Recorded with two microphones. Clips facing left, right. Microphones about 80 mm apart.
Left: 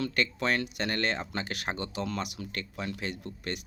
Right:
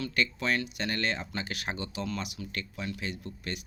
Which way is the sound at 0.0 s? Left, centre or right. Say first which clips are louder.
Left 1 dB; left.